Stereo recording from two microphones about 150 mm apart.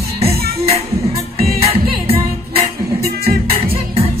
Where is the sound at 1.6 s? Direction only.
40° right (ahead or behind).